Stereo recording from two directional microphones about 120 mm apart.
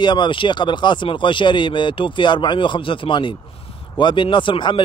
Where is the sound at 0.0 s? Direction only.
40° left (ahead or behind).